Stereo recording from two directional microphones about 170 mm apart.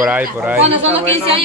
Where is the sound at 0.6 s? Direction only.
35° right (ahead or behind).